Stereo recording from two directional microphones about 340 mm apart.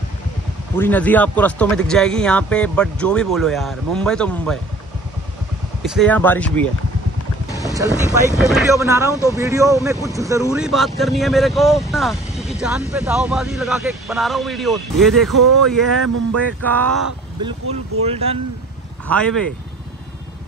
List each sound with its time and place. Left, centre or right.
0.7 s speech: centre
5.9 s speech: centre
7.6 s speech: centre
18.2 s speech: centre
19.0 s speech: centre